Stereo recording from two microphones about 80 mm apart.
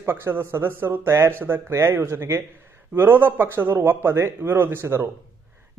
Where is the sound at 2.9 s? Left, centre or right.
Right.